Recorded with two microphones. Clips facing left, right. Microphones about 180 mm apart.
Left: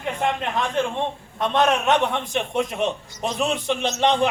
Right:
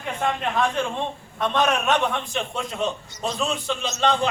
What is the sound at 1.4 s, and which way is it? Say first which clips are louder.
A man's voice: left 2 dB; 20° left (ahead or behind).